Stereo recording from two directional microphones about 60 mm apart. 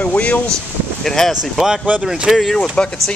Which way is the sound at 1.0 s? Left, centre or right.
Centre.